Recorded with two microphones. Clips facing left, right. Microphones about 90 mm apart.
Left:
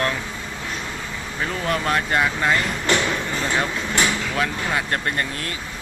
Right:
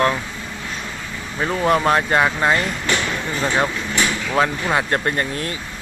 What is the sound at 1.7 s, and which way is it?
Speech, 30° right (ahead or behind).